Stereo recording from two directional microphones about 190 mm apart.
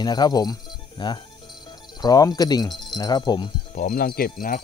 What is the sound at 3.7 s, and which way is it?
Speech, 45° left (ahead or behind).